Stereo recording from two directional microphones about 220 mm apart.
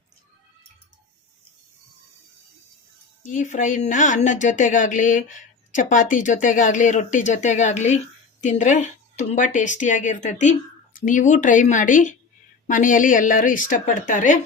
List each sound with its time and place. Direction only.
3.2 s speech: 35° left (ahead or behind)